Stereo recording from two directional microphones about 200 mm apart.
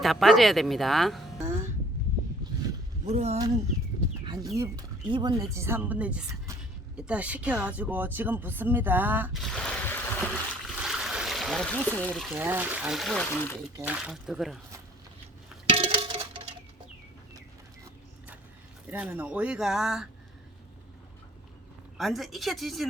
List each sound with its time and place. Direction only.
0.0 s speech: centre (ahead or behind)
3.1 s speech: 30° right (ahead or behind)
4.3 s speech: 15° right (ahead or behind)
9.4 s a sound: centre (ahead or behind)
10.8 s speech: 5° right (ahead or behind)
13.7 s speech: 5° right (ahead or behind)
15.7 s music: 30° right (ahead or behind)
18.9 s speech: 10° right (ahead or behind)
21.9 s speech: centre (ahead or behind)